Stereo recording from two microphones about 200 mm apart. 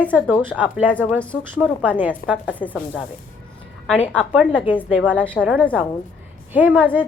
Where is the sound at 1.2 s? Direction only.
5° left (ahead or behind).